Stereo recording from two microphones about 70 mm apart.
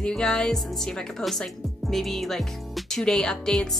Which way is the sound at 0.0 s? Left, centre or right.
Centre.